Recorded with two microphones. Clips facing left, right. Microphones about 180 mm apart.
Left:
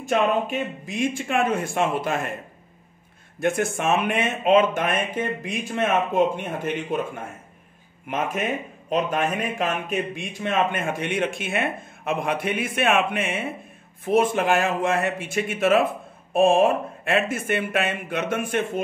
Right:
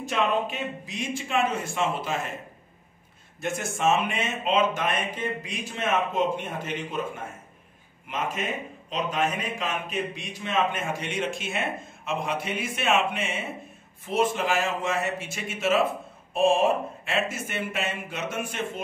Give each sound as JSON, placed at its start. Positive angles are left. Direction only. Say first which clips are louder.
{"t": 0.0, "sound": "speech", "louder": "left 4 dB", "side_deg": 50}
{"t": 3.3, "sound": "speech", "louder": "left 7 dB", "side_deg": 55}
{"t": 8.1, "sound": "speech", "louder": "left 5 dB", "side_deg": 55}